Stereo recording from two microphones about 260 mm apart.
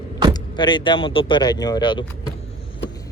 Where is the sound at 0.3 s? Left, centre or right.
Centre.